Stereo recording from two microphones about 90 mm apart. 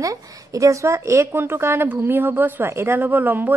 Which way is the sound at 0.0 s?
40° right (ahead or behind).